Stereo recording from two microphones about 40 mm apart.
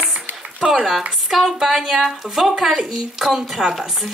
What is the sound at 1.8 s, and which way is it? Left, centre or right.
Speech, centre.